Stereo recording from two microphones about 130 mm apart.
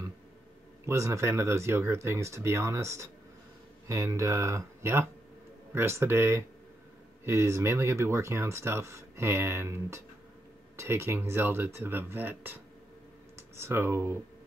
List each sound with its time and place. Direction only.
0.8 s speech: 20° right (ahead or behind)